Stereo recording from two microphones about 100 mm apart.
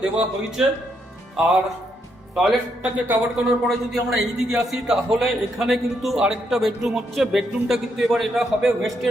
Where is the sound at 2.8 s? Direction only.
15° right (ahead or behind).